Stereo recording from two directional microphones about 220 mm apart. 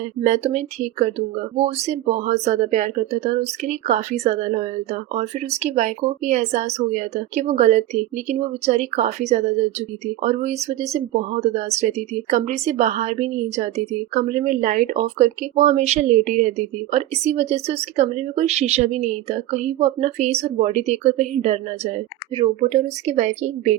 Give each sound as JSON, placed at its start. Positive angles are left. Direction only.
{"t": 0.2, "sound": "speech", "side_deg": -30}